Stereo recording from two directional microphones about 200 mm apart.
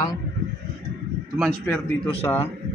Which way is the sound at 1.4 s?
5° left (ahead or behind).